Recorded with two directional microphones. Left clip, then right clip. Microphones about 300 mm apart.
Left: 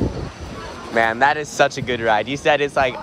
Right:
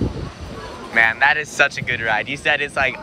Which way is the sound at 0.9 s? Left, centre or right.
Centre.